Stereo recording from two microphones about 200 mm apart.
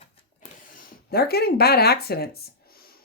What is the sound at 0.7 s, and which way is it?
Speech, 45° left (ahead or behind).